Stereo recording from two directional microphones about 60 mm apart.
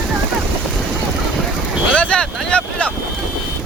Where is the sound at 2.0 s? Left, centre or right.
Centre.